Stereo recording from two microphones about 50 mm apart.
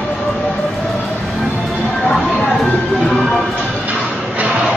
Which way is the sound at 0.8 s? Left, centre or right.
Centre.